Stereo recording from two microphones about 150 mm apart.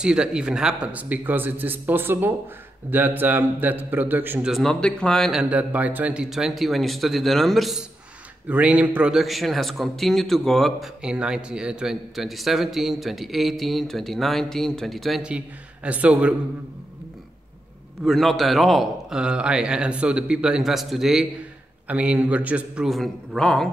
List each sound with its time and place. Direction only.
0.0 s a man's voice: 5° right (ahead or behind)
4.5 s a man's voice: centre (ahead or behind)
18.0 s a man's voice: centre (ahead or behind)